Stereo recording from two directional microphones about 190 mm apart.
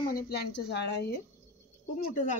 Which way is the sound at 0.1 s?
60° left (ahead or behind).